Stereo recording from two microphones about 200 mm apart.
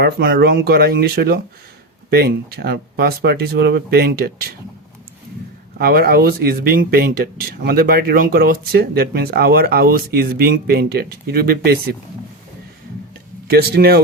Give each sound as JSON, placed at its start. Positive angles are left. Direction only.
{"t": 0.0, "sound": "speech", "side_deg": -50}
{"t": 5.7, "sound": "speech", "side_deg": -50}
{"t": 13.5, "sound": "speech", "side_deg": -50}